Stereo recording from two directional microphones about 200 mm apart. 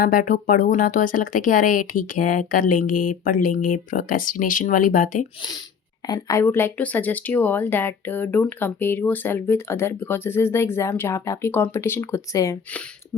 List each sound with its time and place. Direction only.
0.0 s speech: 45° left (ahead or behind)
6.1 s speech: 15° left (ahead or behind)